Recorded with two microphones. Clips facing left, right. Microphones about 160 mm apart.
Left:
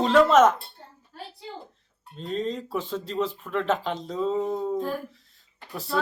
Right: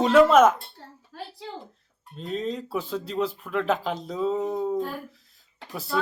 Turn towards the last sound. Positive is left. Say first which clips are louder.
# even
turn(degrees=0)  # may be behind; listen again after turning